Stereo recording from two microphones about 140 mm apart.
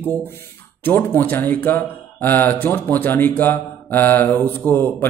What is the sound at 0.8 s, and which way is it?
Speech, 15° left (ahead or behind).